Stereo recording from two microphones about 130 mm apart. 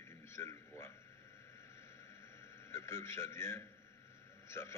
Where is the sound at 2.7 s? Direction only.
20° left (ahead or behind).